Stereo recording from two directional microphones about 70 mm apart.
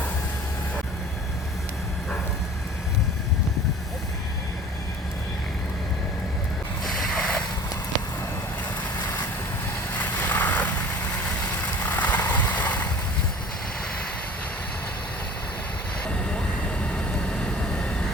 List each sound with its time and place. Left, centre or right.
6.8 s boat: centre
10.0 s vehicle: left
11.9 s a sound: left
16.0 s vehicle: centre